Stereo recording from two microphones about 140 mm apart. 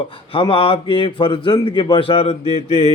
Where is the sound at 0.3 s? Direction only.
40° left (ahead or behind).